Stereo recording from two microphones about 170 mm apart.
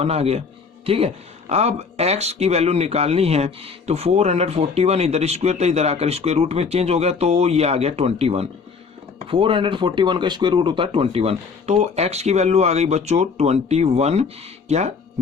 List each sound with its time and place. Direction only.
0.0 s speech: 40° right (ahead or behind)